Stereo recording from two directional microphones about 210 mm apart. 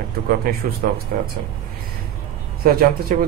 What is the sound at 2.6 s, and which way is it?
Speech, 45° right (ahead or behind).